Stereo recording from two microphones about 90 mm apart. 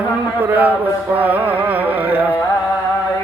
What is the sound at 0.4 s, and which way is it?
Speech, 20° right (ahead or behind).